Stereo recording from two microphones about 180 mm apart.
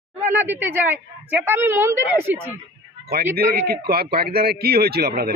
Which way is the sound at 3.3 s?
60° right (ahead or behind).